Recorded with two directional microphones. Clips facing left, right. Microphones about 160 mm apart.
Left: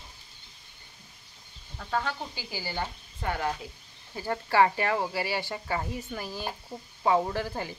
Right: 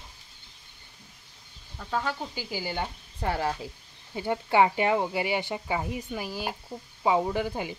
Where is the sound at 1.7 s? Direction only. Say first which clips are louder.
Right 1 dB; 5° right (ahead or behind).